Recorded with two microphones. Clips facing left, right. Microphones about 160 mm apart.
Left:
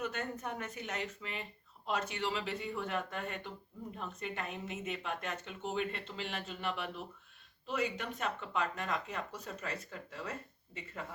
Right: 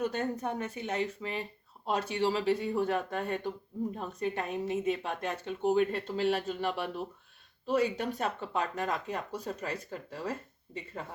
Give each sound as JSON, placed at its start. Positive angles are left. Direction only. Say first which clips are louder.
{"t": 0.0, "sound": "a woman's voice", "louder": "right 7 dB", "side_deg": -30}